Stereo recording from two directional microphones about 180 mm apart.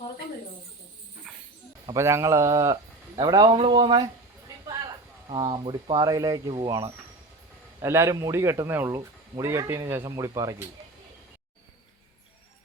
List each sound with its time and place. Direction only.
1.9 s speech: 15° right (ahead or behind)
5.3 s speech: 25° right (ahead or behind)